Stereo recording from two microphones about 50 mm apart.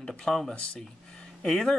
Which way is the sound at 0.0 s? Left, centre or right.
Centre.